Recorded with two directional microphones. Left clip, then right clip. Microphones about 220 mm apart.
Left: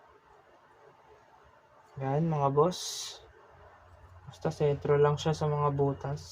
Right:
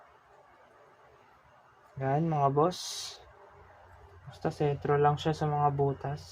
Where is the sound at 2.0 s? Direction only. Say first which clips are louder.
Right 2 dB; 35° right (ahead or behind).